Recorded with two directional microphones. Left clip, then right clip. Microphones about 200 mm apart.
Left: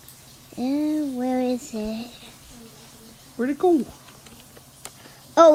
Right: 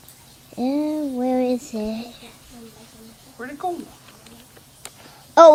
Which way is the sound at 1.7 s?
55° left (ahead or behind).